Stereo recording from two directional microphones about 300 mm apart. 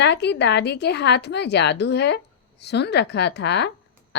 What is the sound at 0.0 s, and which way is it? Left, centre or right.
A woman's voice, left.